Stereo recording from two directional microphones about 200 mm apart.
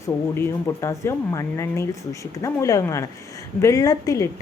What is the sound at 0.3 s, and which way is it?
Speech, 15° left (ahead or behind).